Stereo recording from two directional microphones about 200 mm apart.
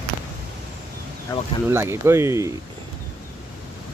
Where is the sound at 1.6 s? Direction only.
10° right (ahead or behind).